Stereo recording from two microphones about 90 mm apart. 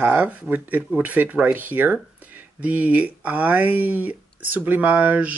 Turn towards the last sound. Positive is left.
turn(degrees=-15)  # may be behind; listen again after turning